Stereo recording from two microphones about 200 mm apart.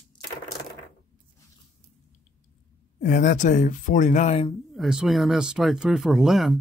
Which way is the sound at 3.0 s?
40° left (ahead or behind).